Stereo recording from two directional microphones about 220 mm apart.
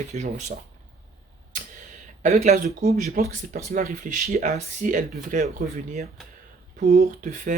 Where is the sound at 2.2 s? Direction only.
35° right (ahead or behind).